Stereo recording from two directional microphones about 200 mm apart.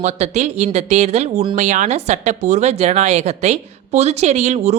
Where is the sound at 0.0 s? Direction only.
35° right (ahead or behind).